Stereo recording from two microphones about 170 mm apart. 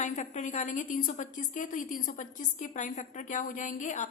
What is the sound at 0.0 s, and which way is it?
A woman's voice, 45° left (ahead or behind).